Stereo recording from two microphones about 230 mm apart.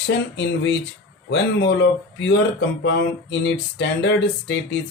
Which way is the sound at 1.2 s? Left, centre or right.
Left.